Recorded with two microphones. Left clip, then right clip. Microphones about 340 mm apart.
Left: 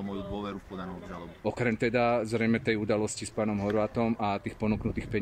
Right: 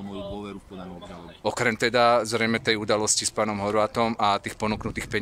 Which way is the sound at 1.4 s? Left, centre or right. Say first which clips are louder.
Right 6 dB; right.